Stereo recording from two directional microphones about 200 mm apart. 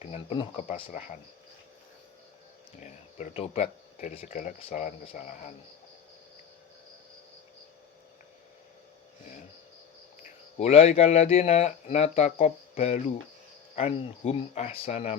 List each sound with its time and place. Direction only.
0.0 s speech: 30° left (ahead or behind)
2.8 s speech: 35° left (ahead or behind)
10.6 s speech: 30° left (ahead or behind)